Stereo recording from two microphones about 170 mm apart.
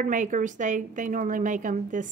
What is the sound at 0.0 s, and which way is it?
A woman's voice, 50° right (ahead or behind).